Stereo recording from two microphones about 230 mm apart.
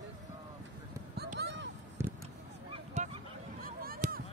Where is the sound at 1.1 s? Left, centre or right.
Right.